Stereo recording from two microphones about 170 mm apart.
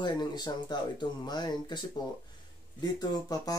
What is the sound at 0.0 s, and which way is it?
Speech, 25° left (ahead or behind).